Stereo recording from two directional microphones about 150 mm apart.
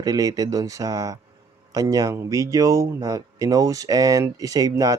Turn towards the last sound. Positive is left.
turn(degrees=-25)  # may be behind; listen again after turning